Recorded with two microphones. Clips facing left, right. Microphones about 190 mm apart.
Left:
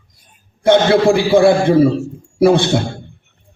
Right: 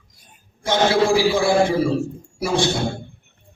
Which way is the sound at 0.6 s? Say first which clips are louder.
Left 7 dB; 60° left (ahead or behind).